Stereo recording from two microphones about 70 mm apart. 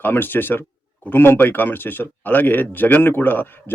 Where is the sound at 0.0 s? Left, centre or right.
Left.